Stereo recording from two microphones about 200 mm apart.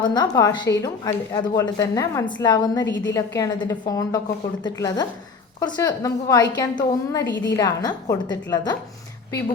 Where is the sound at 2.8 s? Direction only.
65° left (ahead or behind).